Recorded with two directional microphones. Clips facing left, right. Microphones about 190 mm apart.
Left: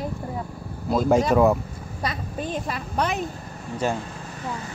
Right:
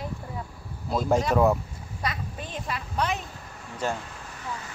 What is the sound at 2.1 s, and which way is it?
A woman's voice, 40° left (ahead or behind).